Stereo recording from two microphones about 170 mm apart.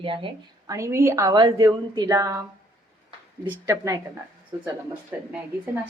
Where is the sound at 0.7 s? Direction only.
15° right (ahead or behind).